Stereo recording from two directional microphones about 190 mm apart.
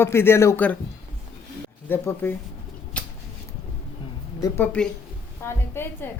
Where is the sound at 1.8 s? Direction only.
10° left (ahead or behind).